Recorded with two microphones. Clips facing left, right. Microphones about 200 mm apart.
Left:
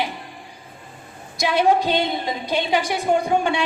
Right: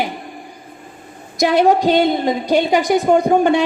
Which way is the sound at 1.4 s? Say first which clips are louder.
Right 5 dB; 45° right (ahead or behind).